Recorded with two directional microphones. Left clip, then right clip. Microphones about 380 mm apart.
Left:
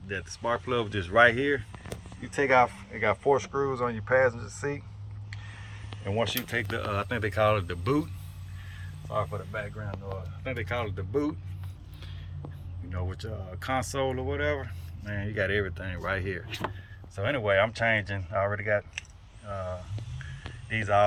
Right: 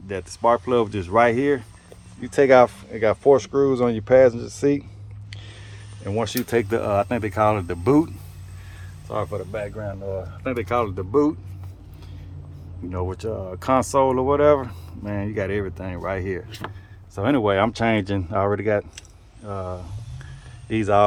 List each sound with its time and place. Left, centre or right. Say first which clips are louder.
0.1 s speech: right 10 dB; centre
6.1 s speech: right 5 dB; centre
9.1 s speech: right 5 dB; centre
12.9 s speech: right 12 dB; centre
20.7 s speech: right 6 dB; centre